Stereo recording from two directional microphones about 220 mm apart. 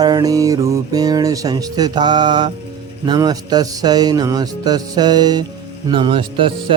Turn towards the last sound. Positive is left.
turn(degrees=-25)  # may be behind; listen again after turning